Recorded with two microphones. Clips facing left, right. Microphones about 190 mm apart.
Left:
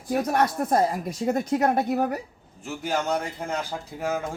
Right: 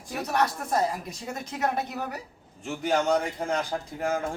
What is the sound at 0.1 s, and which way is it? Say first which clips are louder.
Speech: left 4 dB; 50° left (ahead or behind).